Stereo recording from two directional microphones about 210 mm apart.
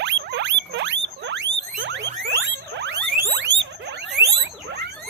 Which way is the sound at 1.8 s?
55° right (ahead or behind).